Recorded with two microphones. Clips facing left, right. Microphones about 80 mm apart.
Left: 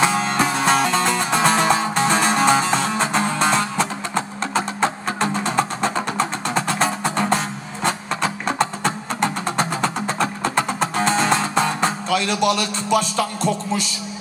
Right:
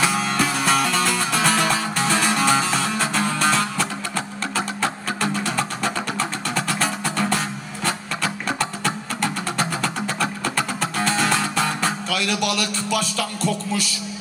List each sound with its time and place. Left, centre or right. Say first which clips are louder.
0.0 s music: left 3 dB; left